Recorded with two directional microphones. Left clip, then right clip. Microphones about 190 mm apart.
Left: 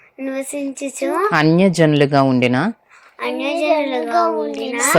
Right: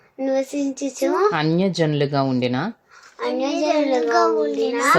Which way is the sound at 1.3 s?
15° left (ahead or behind).